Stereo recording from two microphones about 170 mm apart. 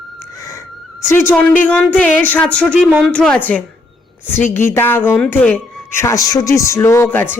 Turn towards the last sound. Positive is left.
turn(degrees=10)  # may be behind; listen again after turning